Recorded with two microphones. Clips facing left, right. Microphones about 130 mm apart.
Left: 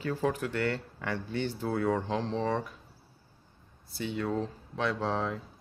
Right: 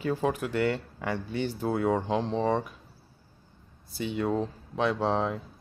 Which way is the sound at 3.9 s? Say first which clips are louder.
Right 3 dB; 15° right (ahead or behind).